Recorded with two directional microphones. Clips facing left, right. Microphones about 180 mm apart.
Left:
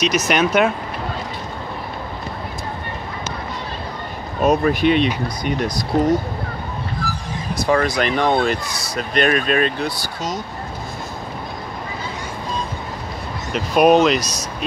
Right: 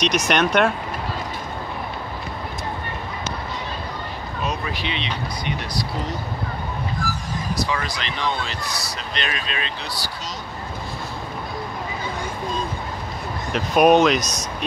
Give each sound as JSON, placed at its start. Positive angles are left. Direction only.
{"t": 0.3, "sound": "speech", "side_deg": 5}
{"t": 4.4, "sound": "speech", "side_deg": 50}
{"t": 7.0, "sound": "a sound", "side_deg": -45}
{"t": 7.6, "sound": "speech", "side_deg": 50}
{"t": 13.5, "sound": "speech", "side_deg": 0}